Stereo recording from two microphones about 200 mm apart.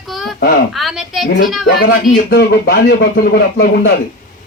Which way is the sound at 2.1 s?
55° left (ahead or behind).